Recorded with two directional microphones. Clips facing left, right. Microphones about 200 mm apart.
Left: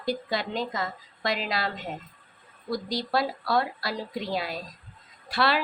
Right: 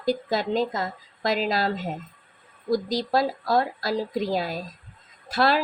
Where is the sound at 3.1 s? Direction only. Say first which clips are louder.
Right 3 dB; 45° right (ahead or behind).